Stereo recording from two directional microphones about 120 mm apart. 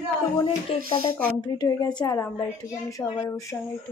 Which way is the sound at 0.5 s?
50° left (ahead or behind).